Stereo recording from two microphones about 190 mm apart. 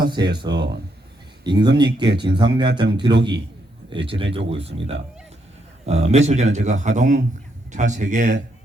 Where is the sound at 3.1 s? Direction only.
25° right (ahead or behind).